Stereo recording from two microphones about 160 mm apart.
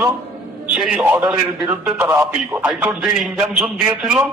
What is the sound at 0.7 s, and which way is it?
A man's voice, 5° right (ahead or behind).